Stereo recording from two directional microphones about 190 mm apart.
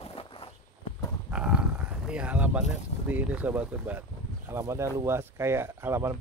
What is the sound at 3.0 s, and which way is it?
Speech, 10° right (ahead or behind).